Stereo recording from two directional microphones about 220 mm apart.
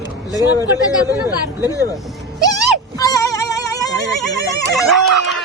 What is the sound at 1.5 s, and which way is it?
Speech, 15° left (ahead or behind).